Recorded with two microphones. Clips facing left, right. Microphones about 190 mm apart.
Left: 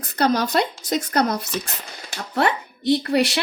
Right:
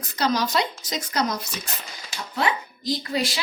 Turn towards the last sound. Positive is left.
turn(degrees=65)  # may be behind; listen again after turning